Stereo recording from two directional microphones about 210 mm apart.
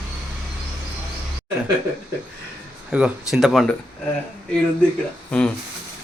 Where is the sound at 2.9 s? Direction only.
5° right (ahead or behind).